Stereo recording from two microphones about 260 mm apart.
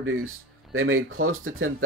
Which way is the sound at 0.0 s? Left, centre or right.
Right.